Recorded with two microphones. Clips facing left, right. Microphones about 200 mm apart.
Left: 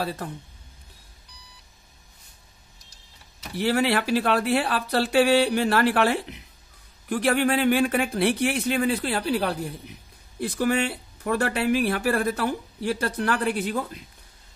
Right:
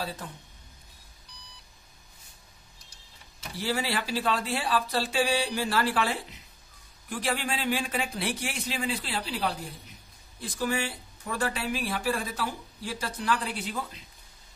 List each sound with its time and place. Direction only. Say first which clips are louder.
0.0 s speech: left 6 dB; 65° left (ahead or behind)
3.5 s speech: left 8 dB; 60° left (ahead or behind)